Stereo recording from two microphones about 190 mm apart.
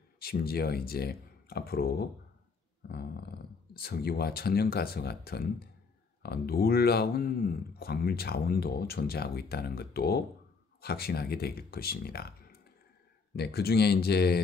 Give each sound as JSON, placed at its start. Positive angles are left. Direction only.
{"t": 0.2, "sound": "speech", "side_deg": 55}